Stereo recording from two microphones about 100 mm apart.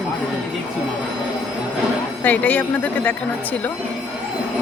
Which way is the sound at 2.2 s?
15° left (ahead or behind).